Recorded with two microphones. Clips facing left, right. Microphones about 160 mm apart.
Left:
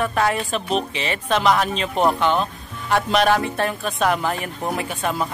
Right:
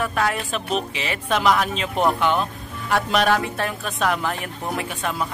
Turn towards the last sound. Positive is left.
turn(degrees=0)  # may be behind; listen again after turning